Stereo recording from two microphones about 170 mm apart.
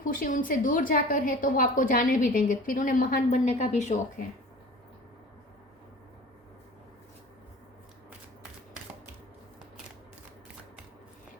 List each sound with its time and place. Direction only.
0.0 s a woman's voice: 55° left (ahead or behind)